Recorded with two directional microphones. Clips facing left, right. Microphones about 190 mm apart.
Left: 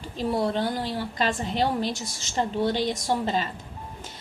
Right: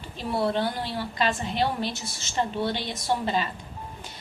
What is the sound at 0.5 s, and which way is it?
Speech, 40° left (ahead or behind).